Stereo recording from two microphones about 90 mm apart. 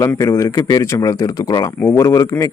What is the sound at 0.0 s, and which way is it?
Speech, 35° left (ahead or behind).